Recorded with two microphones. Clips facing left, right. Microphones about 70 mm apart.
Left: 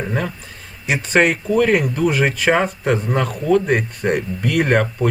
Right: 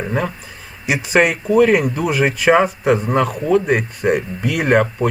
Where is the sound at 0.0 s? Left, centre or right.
Centre.